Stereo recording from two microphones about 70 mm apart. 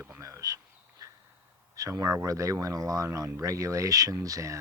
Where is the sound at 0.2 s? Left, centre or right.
Right.